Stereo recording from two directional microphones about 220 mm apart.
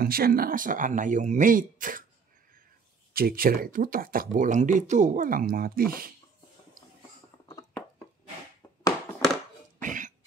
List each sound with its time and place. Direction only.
0.0 s speech: 45° right (ahead or behind)
3.1 s speech: 45° right (ahead or behind)
9.8 s cough: 35° right (ahead or behind)